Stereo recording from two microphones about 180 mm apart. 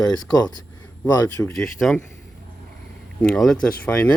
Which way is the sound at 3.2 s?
Centre (ahead or behind).